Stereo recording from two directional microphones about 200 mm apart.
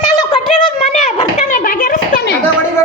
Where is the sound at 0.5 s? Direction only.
40° left (ahead or behind).